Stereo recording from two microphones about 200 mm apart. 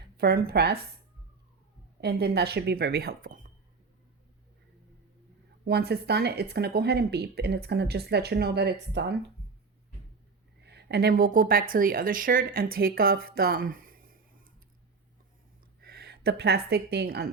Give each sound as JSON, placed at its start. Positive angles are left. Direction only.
{"t": 0.2, "sound": "speech", "side_deg": -50}
{"t": 2.0, "sound": "speech", "side_deg": -55}
{"t": 5.6, "sound": "speech", "side_deg": -55}
{"t": 10.7, "sound": "speech", "side_deg": -55}
{"t": 15.8, "sound": "a woman's voice", "side_deg": -50}